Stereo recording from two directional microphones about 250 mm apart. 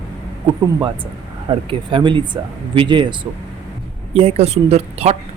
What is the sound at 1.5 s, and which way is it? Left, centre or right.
Speech, centre.